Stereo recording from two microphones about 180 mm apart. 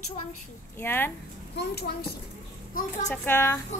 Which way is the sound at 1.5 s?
60° left (ahead or behind).